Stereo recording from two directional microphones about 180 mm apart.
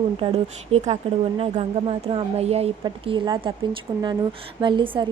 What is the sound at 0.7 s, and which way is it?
A woman's voice, 35° right (ahead or behind).